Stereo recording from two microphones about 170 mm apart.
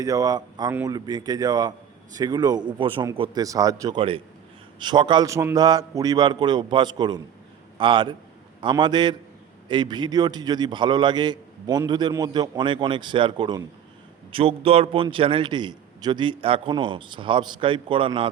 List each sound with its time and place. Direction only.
0.0 s a man's voice: 20° right (ahead or behind)